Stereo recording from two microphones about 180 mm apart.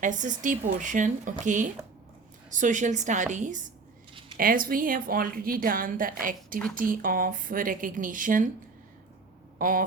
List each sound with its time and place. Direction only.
0.0 s a woman's voice: 45° right (ahead or behind)
9.6 s hum: 50° right (ahead or behind)